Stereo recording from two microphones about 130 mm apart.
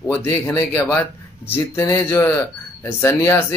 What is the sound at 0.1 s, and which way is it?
Speech, 20° left (ahead or behind).